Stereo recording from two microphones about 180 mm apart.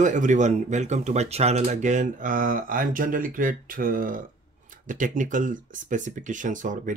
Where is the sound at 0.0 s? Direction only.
45° right (ahead or behind).